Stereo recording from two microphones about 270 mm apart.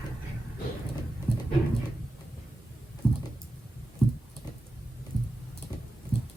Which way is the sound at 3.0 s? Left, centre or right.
Centre.